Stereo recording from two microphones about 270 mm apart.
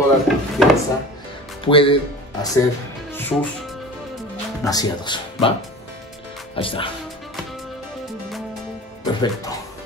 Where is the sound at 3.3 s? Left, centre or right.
Centre.